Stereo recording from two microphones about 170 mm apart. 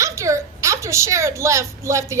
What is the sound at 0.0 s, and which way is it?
A woman's voice, 20° right (ahead or behind).